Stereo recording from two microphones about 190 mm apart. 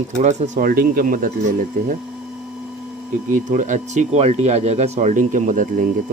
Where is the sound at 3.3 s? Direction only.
40° right (ahead or behind).